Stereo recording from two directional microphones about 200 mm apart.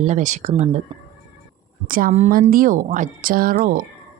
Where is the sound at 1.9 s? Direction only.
45° right (ahead or behind).